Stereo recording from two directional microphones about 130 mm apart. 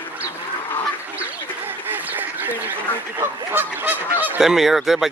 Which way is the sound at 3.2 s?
15° right (ahead or behind).